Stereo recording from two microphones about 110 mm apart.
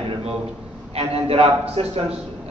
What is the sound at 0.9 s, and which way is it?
Speech, 65° right (ahead or behind).